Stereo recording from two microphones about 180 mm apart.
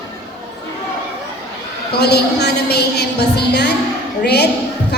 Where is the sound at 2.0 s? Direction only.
65° left (ahead or behind).